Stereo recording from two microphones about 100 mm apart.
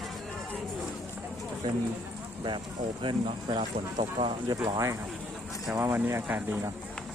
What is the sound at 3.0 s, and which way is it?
Speech, 55° right (ahead or behind).